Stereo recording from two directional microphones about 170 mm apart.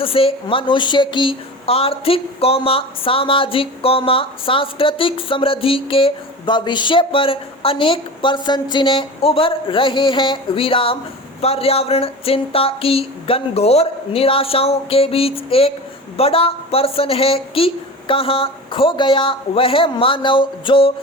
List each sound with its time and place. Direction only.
0.0 s a woman's voice: 35° left (ahead or behind)